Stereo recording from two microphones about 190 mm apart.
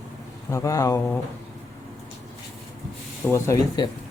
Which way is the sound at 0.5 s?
15° left (ahead or behind).